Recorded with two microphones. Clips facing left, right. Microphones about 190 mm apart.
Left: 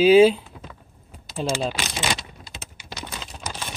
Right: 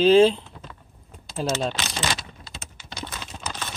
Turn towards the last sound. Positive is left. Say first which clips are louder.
# even
turn(degrees=10)  # may be behind; listen again after turning